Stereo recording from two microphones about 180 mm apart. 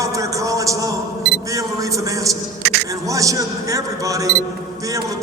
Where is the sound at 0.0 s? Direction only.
20° right (ahead or behind).